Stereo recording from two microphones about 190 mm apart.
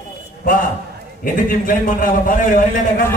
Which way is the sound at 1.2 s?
45° left (ahead or behind).